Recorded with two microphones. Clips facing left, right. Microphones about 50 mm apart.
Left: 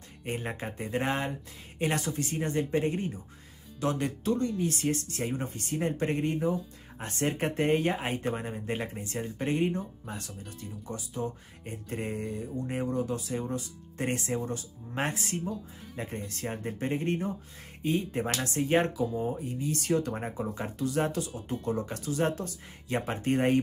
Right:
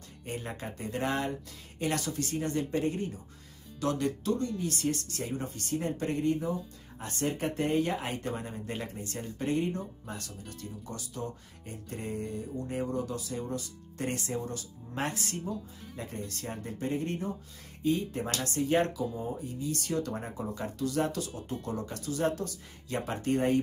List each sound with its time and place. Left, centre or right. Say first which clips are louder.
0.3 s speech: left 3 dB; left
11.9 s speech: left 2 dB; left
15.4 s speech: left 1 dB; centre
16.3 s speech: left 3 dB; left